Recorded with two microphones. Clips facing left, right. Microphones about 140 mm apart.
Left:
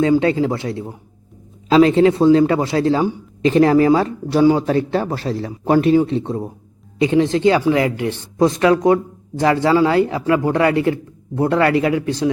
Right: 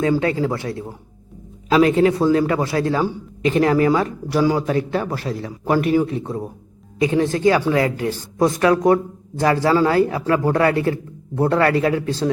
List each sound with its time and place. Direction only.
0.0 s a man's voice: 25° left (ahead or behind)